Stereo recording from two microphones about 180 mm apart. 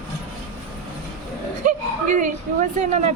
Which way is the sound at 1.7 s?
45° right (ahead or behind).